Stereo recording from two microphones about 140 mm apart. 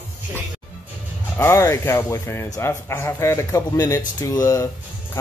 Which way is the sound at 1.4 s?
20° left (ahead or behind).